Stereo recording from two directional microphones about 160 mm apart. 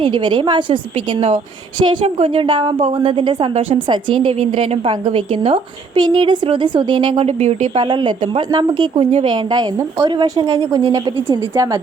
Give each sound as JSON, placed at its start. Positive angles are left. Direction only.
{"t": 0.0, "sound": "a woman's voice", "side_deg": -30}